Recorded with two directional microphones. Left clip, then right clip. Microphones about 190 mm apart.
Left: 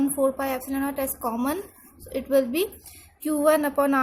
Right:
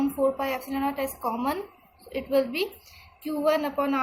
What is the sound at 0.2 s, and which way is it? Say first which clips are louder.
A woman's voice: right 1 dB; 40° left (ahead or behind).